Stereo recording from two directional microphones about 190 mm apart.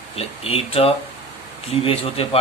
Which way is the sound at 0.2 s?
30° left (ahead or behind).